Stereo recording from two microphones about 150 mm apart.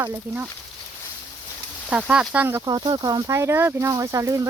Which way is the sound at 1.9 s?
5° right (ahead or behind).